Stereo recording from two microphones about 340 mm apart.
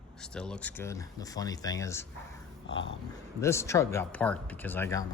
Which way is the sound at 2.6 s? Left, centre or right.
Left.